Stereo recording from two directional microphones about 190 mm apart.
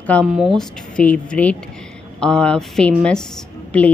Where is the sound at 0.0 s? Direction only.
5° left (ahead or behind).